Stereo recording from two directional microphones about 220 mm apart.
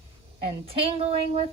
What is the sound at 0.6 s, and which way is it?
Speech, 25° right (ahead or behind).